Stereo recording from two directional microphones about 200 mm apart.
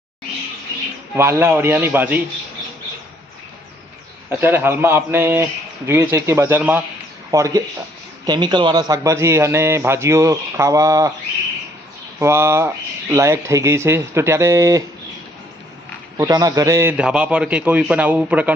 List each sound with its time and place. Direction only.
1.1 s a man's voice: 10° right (ahead or behind)
4.3 s a man's voice: 10° right (ahead or behind)
12.2 s a man's voice: 10° right (ahead or behind)
16.1 s a man's voice: 15° right (ahead or behind)